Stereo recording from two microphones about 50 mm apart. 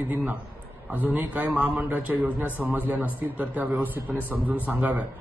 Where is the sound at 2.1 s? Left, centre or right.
Right.